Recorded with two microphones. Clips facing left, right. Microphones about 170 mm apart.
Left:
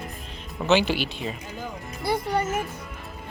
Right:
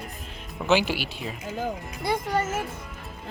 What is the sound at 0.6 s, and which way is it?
Speech, 10° right (ahead or behind).